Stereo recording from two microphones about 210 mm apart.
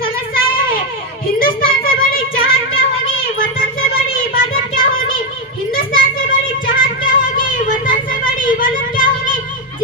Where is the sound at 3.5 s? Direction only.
45° left (ahead or behind).